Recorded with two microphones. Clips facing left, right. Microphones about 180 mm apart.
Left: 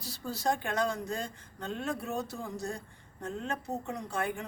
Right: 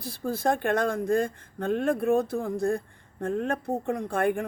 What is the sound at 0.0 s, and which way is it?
Speech, 55° right (ahead or behind).